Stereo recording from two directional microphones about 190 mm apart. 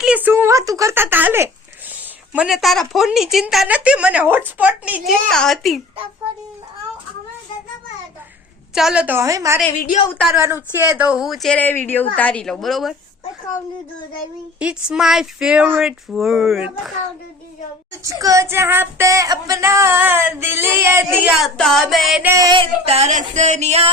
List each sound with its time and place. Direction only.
0.0 s a woman's voice: 10° right (ahead or behind)
8.7 s female singing: 5° right (ahead or behind)
9.8 s a woman's voice: 40° left (ahead or behind)
10.1 s a woman's voice: 5° left (ahead or behind)
10.8 s a woman's voice: 10° right (ahead or behind)
14.6 s a woman's voice: 5° right (ahead or behind)
18.0 s female singing: 15° right (ahead or behind)
21.4 s a sound: centre (ahead or behind); by 23.9 s 35° right (ahead or behind)